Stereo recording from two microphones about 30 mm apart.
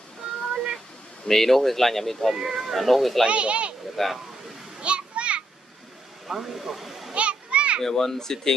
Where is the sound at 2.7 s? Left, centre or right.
Centre.